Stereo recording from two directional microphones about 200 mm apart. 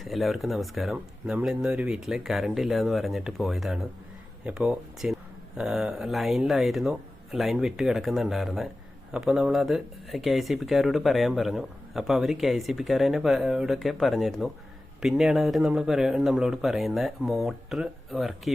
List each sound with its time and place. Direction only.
0.0 s speech: centre (ahead or behind)